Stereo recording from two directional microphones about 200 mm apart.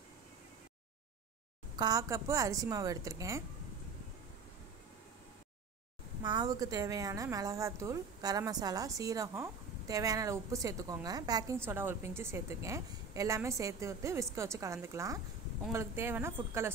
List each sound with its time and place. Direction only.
1.8 s a woman's voice: 20° right (ahead or behind)
6.2 s a woman's voice: 20° right (ahead or behind)